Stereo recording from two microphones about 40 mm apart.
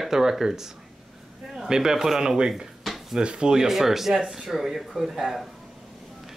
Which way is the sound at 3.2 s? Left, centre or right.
Right.